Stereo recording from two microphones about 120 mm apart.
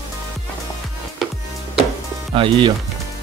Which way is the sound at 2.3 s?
45° right (ahead or behind).